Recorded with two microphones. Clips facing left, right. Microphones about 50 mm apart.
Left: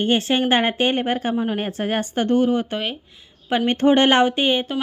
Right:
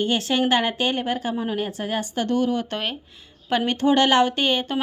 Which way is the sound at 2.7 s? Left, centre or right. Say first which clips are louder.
Left 2 dB; centre.